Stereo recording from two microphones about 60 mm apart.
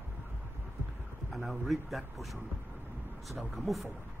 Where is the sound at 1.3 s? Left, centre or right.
Centre.